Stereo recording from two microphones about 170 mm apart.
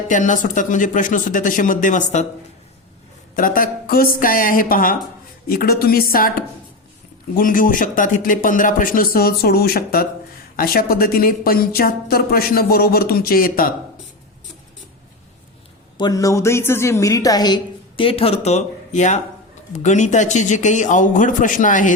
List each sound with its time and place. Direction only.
0.1 s speech: 50° left (ahead or behind)
3.3 s a woman's voice: 55° left (ahead or behind)
16.0 s a woman's voice: 20° left (ahead or behind); by 21.9 s 50° left (ahead or behind)